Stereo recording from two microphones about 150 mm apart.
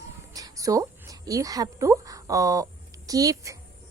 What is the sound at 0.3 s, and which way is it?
A woman's voice, 25° right (ahead or behind).